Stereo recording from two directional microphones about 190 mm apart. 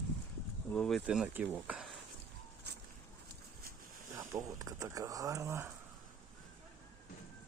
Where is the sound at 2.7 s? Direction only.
60° right (ahead or behind).